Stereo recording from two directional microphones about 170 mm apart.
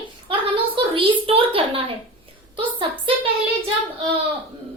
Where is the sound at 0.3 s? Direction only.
30° right (ahead or behind).